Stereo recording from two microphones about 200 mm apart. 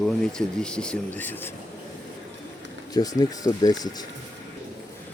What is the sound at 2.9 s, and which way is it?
Speech, 20° left (ahead or behind).